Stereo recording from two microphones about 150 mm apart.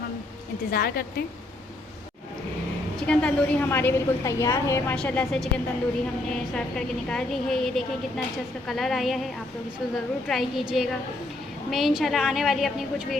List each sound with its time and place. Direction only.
0.7 s a woman's voice: 90° left
3.1 s a woman's voice: 10° left (ahead or behind)
4.9 s a woman's voice: 5° left (ahead or behind)
6.5 s a woman's voice: 5° left (ahead or behind)